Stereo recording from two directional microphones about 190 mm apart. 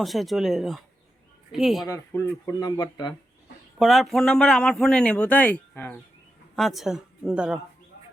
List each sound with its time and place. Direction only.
0.0 s a man's voice: centre (ahead or behind)
1.9 s speech: 15° left (ahead or behind)
3.8 s a man's voice: centre (ahead or behind)